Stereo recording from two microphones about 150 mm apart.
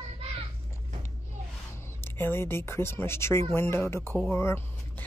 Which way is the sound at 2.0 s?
15° left (ahead or behind).